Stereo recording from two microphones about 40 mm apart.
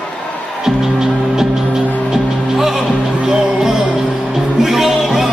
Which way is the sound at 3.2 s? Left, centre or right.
Centre.